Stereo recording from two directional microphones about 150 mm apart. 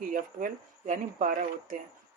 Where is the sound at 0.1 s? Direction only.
60° right (ahead or behind).